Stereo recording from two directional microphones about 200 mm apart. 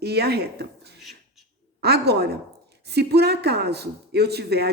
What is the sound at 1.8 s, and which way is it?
A woman's voice, 55° right (ahead or behind).